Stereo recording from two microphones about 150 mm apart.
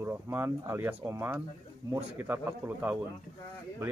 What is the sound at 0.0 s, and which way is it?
Speech, 15° right (ahead or behind).